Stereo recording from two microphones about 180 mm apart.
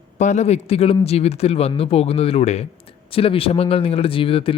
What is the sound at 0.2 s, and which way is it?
Speech, 40° left (ahead or behind).